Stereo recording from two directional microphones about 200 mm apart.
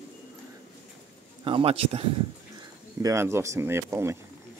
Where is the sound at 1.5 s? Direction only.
30° right (ahead or behind).